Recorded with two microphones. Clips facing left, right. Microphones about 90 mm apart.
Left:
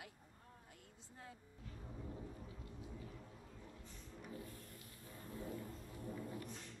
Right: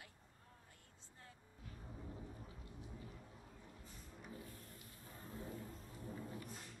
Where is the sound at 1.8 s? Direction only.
5° left (ahead or behind).